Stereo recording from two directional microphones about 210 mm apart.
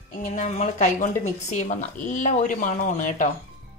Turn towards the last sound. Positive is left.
turn(degrees=35)  # may be behind; listen again after turning